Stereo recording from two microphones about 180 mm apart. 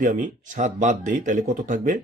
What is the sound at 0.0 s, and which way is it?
Speech, 45° right (ahead or behind).